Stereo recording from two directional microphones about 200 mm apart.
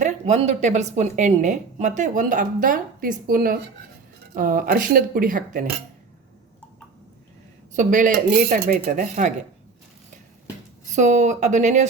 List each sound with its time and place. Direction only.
0.0 s a woman's voice: 35° right (ahead or behind)
7.8 s a woman's voice: 40° right (ahead or behind)
10.9 s a woman's voice: 35° right (ahead or behind)